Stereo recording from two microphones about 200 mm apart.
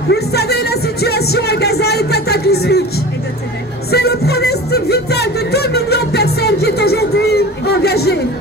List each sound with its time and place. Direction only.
0.1 s music: 55° left (ahead or behind)
3.9 s music: 55° left (ahead or behind)